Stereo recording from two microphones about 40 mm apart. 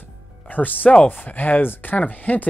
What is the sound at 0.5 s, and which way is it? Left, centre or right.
Music, left.